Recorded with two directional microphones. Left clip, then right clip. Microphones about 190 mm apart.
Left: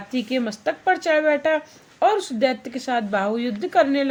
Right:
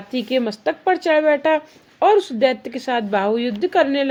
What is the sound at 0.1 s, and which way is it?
Speech, 25° right (ahead or behind).